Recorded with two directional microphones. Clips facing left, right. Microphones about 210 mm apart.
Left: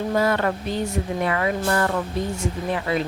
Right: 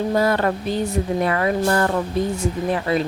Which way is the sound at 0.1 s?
35° right (ahead or behind).